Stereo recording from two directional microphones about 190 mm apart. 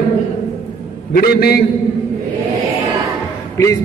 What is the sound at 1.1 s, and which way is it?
Speech, 55° left (ahead or behind).